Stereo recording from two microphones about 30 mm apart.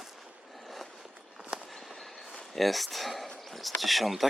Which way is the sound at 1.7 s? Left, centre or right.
Centre.